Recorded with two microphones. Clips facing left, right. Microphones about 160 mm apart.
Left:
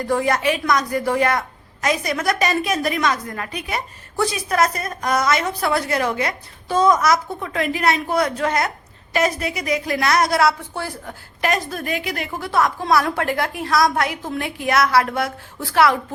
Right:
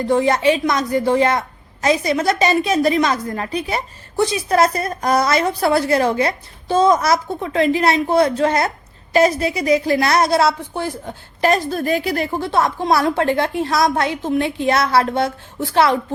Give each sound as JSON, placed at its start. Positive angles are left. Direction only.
{"t": 0.1, "sound": "a woman's voice", "side_deg": -25}
{"t": 11.3, "sound": "a woman's voice", "side_deg": -30}